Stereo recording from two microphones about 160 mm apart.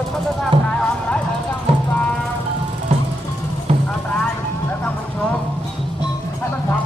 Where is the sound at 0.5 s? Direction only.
30° right (ahead or behind).